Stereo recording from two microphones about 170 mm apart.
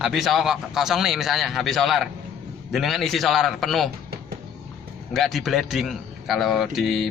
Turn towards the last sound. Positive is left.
turn(degrees=0)  # may be behind; listen again after turning